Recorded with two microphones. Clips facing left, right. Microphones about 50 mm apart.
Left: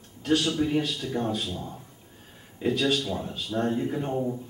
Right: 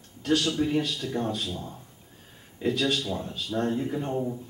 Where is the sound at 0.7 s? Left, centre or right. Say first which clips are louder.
Even; centre.